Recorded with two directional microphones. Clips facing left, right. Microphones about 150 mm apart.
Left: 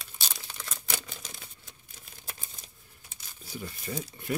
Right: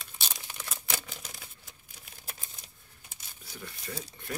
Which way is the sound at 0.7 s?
5° right (ahead or behind).